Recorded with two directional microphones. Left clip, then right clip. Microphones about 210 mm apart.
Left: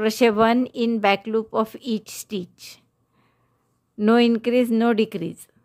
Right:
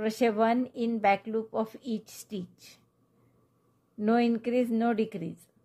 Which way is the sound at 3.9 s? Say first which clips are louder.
Left 9 dB; 40° left (ahead or behind).